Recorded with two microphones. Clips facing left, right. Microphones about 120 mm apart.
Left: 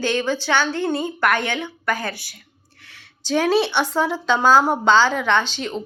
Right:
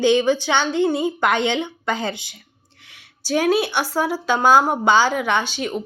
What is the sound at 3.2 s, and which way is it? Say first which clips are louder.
Speech: even; 10° right (ahead or behind).